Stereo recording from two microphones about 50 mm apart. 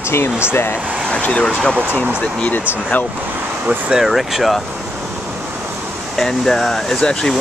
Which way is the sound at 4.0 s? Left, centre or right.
Centre.